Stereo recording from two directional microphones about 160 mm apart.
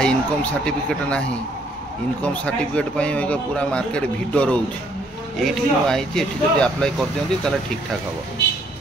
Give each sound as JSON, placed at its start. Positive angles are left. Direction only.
{"t": 0.0, "sound": "a man's voice", "side_deg": 10}
{"t": 2.2, "sound": "a man's voice", "side_deg": 5}